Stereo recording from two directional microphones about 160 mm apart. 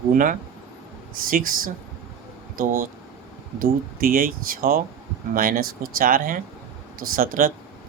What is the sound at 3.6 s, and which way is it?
Speech, 65° right (ahead or behind).